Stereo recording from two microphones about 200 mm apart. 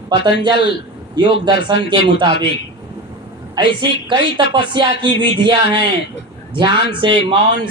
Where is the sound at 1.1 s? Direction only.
25° right (ahead or behind).